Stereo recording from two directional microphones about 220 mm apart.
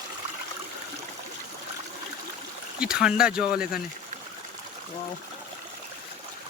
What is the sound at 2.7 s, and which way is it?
Speech, 5° right (ahead or behind).